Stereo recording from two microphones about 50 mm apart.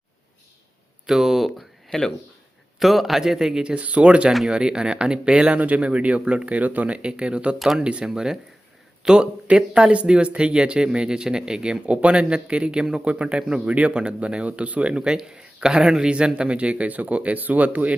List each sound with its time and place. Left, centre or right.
1.0 s speech: centre
1.9 s speech: centre
2.7 s speech: centre; by 4.3 s right
4.3 s speech: centre
5.5 s speech: right
7.6 s speech: centre
7.9 s speech: right
8.1 s speech: centre
11.9 s speech: right